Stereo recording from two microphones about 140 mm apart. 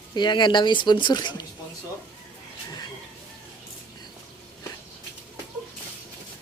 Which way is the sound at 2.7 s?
30° left (ahead or behind).